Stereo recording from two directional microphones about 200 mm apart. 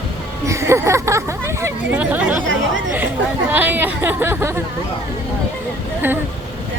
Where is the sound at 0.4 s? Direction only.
15° right (ahead or behind).